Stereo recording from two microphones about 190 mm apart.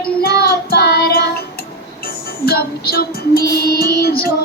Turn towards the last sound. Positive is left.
turn(degrees=55)  # may be behind; listen again after turning